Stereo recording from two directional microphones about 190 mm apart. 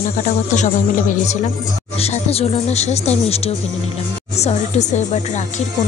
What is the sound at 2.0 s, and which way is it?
Speech, 35° left (ahead or behind).